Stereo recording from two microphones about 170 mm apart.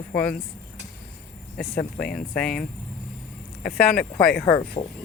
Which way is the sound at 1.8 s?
55° left (ahead or behind).